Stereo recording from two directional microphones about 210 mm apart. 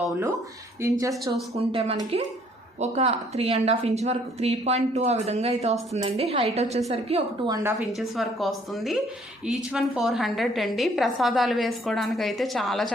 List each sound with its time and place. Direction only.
0.8 s speech: 15° right (ahead or behind)
1.1 s a woman's voice: centre (ahead or behind)
1.5 s a woman's voice: 25° right (ahead or behind)
7.8 s a woman's voice: centre (ahead or behind)